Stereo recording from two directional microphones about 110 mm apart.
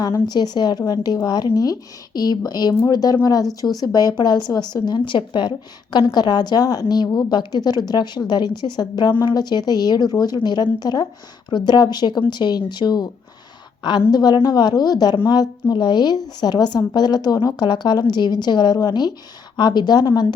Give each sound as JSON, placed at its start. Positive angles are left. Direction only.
{"t": 0.3, "sound": "a woman's voice", "side_deg": 40}
{"t": 14.1, "sound": "a woman's voice", "side_deg": 40}